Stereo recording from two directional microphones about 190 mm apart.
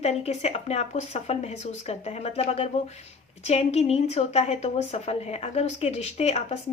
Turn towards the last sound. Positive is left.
turn(degrees=35)  # may be behind; listen again after turning